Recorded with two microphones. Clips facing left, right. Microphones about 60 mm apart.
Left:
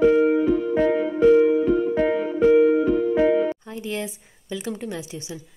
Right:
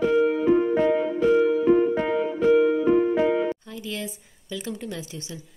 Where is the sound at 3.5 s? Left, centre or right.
Left.